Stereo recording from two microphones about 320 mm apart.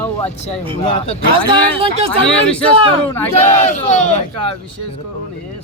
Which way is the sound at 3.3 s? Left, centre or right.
Left.